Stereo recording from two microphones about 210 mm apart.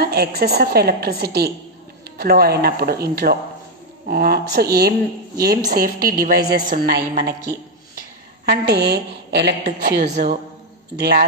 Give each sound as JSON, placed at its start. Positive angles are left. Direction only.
{"t": 0.0, "sound": "a woman's voice", "side_deg": -50}
{"t": 8.5, "sound": "a woman's voice", "side_deg": -50}
{"t": 10.1, "sound": "a woman's voice", "side_deg": -35}
{"t": 11.0, "sound": "a woman's voice", "side_deg": -50}